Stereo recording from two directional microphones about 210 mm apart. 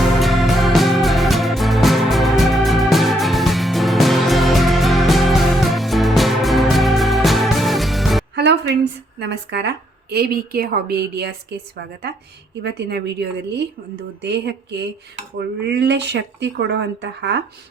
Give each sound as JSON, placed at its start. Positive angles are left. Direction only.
{"t": 0.0, "sound": "music", "side_deg": 0}
{"t": 8.4, "sound": "a woman's voice", "side_deg": -55}
{"t": 12.6, "sound": "a woman's voice", "side_deg": -55}